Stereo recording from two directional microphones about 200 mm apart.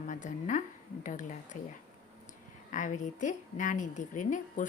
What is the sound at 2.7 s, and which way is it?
A woman's voice, 40° left (ahead or behind).